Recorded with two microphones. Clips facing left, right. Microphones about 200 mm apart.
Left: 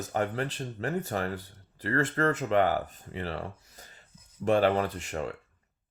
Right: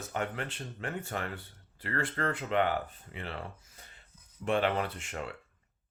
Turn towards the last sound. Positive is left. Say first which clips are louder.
# left 6 dB
turn(degrees=40)  # may be behind; listen again after turning